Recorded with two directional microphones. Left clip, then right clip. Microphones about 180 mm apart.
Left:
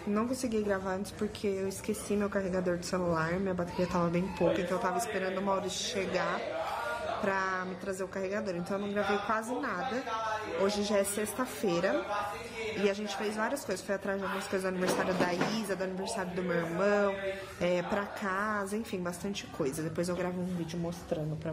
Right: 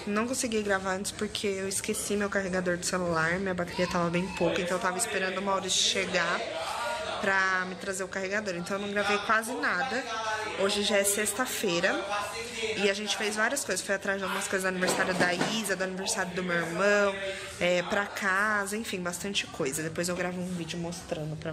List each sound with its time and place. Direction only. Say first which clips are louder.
0.1 s a woman's voice: right 3 dB; 10° left (ahead or behind)
7.2 s a woman's voice: right 7 dB; 15° left (ahead or behind)
8.9 s a woman's voice: right 5 dB; 10° left (ahead or behind)